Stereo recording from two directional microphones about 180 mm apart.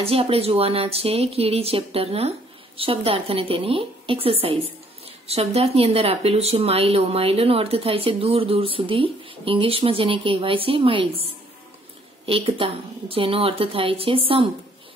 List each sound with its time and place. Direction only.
0.0 s speech: 30° right (ahead or behind)
12.3 s speech: 30° right (ahead or behind)